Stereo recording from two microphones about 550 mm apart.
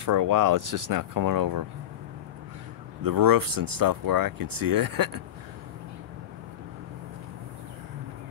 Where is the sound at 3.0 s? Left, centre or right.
Right.